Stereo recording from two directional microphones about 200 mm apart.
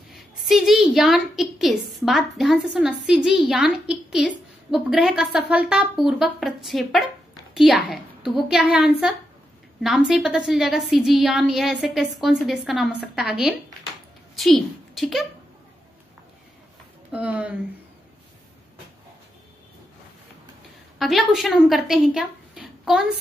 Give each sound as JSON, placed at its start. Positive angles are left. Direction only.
{"t": 0.1, "sound": "a woman's voice", "side_deg": 0}
{"t": 17.1, "sound": "speech", "side_deg": -5}
{"t": 21.0, "sound": "speech", "side_deg": 0}